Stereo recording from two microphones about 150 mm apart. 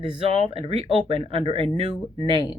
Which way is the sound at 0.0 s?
35° right (ahead or behind).